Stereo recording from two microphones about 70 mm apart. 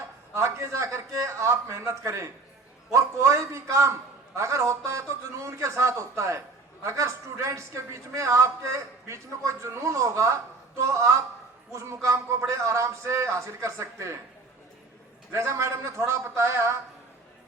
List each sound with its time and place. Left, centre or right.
0.3 s speech: right
15.3 s speech: right